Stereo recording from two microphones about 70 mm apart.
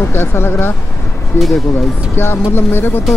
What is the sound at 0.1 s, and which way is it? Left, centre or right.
Speech, left.